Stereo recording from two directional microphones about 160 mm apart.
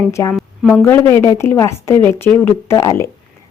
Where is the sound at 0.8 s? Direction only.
15° left (ahead or behind).